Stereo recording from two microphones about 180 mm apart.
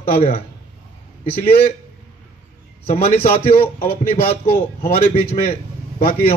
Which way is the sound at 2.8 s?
35° left (ahead or behind).